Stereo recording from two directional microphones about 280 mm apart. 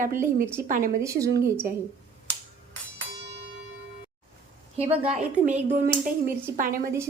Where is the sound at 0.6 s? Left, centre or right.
Right.